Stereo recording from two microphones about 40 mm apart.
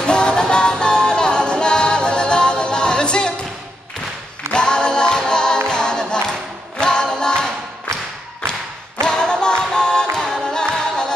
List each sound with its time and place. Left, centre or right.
0.0 s music: left
4.5 s a capella: left
5.7 s music: centre
9.0 s a capella: centre